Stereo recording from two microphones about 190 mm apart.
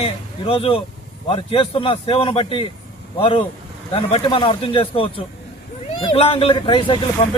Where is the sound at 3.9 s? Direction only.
30° left (ahead or behind).